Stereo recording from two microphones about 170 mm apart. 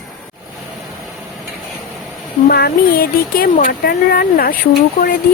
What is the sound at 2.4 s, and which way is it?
Speech, 65° left (ahead or behind).